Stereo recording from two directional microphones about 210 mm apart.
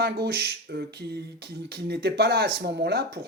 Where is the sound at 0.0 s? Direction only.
50° right (ahead or behind).